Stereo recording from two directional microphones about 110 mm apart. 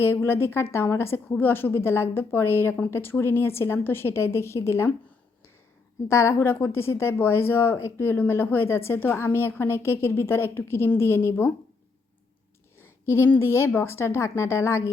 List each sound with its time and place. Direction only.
0.0 s speech: 20° left (ahead or behind)
6.1 s speech: 25° left (ahead or behind)
12.8 s speech: 20° left (ahead or behind)